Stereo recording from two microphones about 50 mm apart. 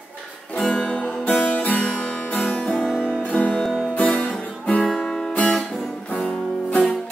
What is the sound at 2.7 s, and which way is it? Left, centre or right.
Music, centre.